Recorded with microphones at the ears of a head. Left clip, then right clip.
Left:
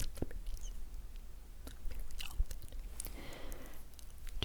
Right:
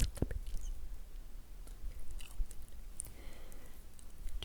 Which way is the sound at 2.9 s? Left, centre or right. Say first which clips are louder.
Left 5 dB; left.